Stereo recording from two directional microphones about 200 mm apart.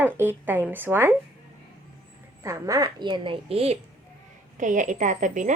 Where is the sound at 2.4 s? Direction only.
15° right (ahead or behind).